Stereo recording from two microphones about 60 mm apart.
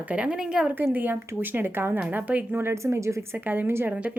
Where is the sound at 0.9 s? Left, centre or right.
Right.